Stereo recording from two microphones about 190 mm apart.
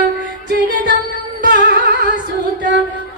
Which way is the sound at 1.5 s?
65° right (ahead or behind).